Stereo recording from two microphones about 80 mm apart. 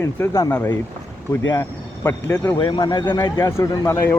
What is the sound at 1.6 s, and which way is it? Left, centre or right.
Speech, left.